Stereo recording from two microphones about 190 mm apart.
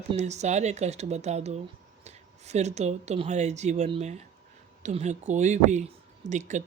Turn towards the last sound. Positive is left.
turn(degrees=-40)  # may be behind; listen again after turning